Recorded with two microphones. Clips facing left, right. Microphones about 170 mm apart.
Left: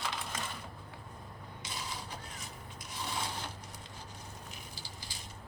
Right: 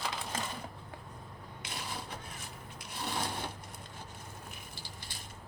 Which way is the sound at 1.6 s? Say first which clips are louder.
Right 1 dB; 60° right (ahead or behind).